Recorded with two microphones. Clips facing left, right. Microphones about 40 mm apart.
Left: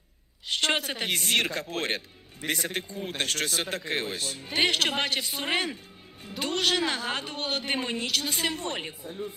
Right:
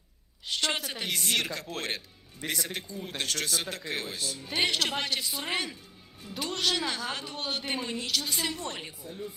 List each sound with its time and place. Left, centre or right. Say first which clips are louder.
0.5 s a woman's voice: left 4 dB; left
2.4 s a man's voice: left 4 dB; centre
2.7 s a woman's voice: left 4 dB; left